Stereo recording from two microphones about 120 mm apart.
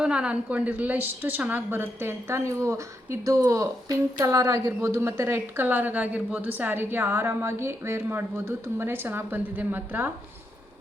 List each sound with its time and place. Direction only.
0.0 s a woman's voice: 10° right (ahead or behind)